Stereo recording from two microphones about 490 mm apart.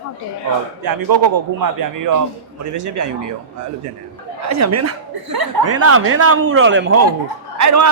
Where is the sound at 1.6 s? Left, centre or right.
Right.